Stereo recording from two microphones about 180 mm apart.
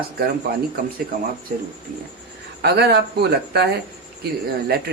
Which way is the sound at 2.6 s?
65° right (ahead or behind).